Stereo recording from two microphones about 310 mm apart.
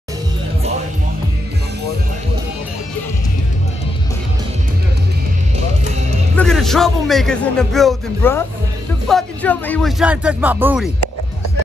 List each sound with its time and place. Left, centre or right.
6.3 s a man's voice: centre